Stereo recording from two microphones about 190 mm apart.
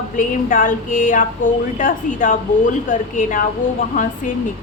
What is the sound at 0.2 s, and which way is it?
A woman's voice, 45° left (ahead or behind).